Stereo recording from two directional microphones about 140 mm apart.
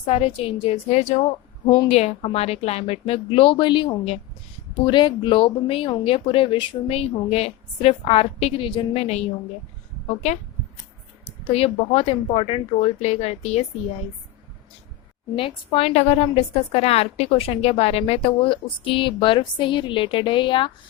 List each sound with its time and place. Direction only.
0.0 s a woman's voice: 45° left (ahead or behind)
11.3 s speech: 45° left (ahead or behind)
15.4 s a woman's voice: 40° left (ahead or behind)